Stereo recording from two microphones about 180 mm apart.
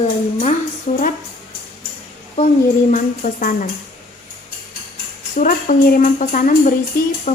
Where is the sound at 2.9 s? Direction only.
45° left (ahead or behind).